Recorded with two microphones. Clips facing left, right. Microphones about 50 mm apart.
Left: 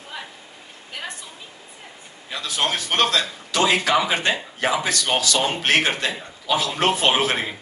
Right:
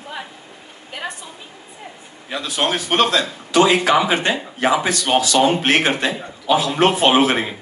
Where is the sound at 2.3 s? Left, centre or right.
Right.